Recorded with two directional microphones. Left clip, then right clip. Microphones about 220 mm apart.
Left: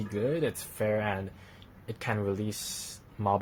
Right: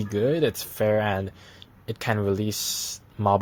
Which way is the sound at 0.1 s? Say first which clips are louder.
Right 7 dB; 35° right (ahead or behind).